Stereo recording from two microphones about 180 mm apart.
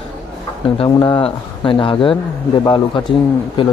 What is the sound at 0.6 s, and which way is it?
Speech, 25° left (ahead or behind).